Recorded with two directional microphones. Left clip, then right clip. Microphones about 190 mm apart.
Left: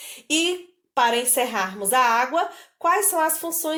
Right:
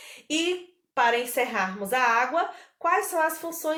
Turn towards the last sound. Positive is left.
turn(degrees=40)  # may be behind; listen again after turning